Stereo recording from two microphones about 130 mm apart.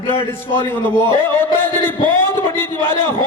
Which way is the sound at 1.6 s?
15° left (ahead or behind).